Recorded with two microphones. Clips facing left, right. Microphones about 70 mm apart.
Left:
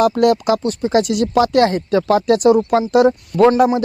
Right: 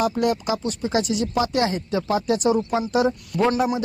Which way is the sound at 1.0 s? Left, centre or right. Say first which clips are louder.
Left 7 dB; left.